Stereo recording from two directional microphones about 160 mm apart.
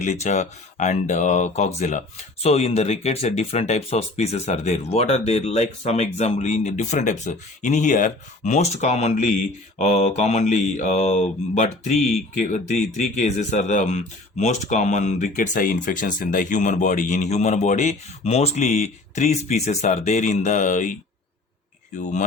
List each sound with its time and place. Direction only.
0.0 s speech: 45° left (ahead or behind)